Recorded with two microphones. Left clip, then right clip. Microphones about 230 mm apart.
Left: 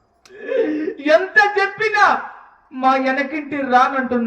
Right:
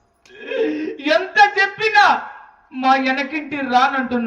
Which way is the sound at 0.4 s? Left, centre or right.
Right.